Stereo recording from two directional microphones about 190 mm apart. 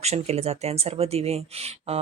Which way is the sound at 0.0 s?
35° right (ahead or behind).